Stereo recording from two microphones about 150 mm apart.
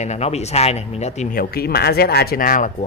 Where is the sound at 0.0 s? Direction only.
45° left (ahead or behind).